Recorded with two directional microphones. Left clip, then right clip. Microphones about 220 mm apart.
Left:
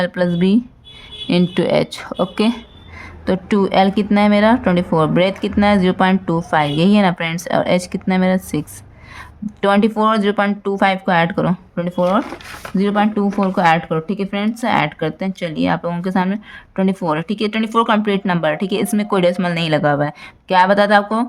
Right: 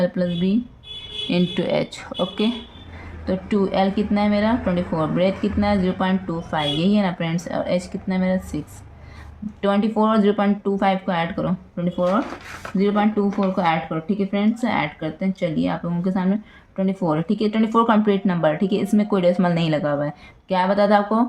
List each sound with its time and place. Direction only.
0.0 s a woman's voice: 40° left (ahead or behind)